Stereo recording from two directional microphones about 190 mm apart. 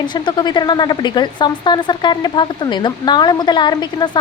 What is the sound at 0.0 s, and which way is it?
A woman's voice, 25° left (ahead or behind).